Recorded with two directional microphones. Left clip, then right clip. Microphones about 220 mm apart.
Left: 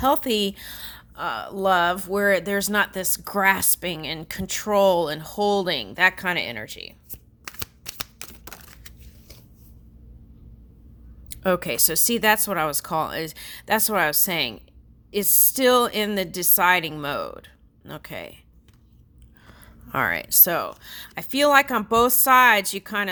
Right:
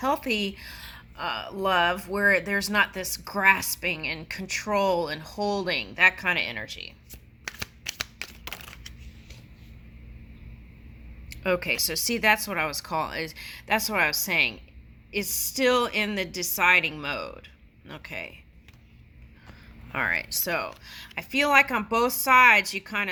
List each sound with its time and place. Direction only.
0.0 s speech: 45° left (ahead or behind)
7.4 s shuffling cards: 25° left (ahead or behind)
11.3 s a woman's voice: 45° left (ahead or behind)
19.5 s speech: 40° left (ahead or behind)